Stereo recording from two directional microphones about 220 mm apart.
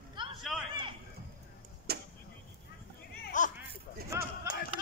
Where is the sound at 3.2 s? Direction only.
35° left (ahead or behind).